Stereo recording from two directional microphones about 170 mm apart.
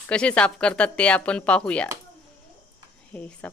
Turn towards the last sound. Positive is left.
turn(degrees=10)  # may be behind; listen again after turning